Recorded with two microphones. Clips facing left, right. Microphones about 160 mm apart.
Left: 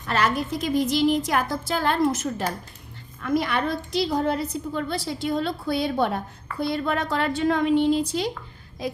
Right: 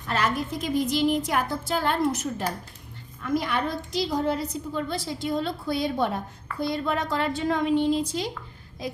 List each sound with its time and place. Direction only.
0.1 s a woman's voice: 80° left
3.2 s a woman's voice: 75° left (ahead or behind)